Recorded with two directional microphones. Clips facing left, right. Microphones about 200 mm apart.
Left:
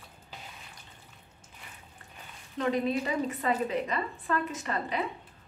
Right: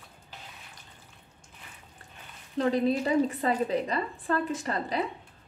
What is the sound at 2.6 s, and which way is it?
A woman's voice, 35° right (ahead or behind).